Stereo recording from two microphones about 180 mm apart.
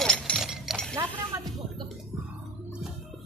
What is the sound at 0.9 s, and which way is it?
Music, 20° right (ahead or behind).